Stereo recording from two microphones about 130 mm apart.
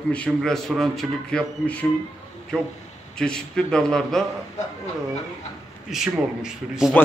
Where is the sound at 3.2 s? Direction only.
5° left (ahead or behind).